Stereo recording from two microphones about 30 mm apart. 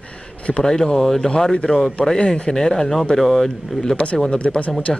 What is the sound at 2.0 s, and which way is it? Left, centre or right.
Speech, left.